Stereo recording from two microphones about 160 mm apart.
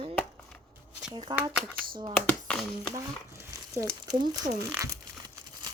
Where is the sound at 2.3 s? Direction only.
5° left (ahead or behind).